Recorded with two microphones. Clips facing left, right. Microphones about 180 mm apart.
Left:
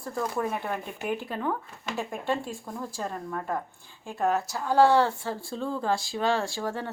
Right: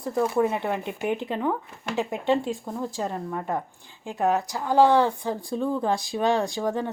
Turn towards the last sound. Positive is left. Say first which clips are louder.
# right 5 dB
turn(degrees=-15)  # may be behind; listen again after turning